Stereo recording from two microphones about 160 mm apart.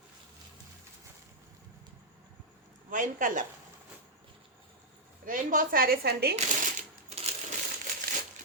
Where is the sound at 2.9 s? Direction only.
55° right (ahead or behind).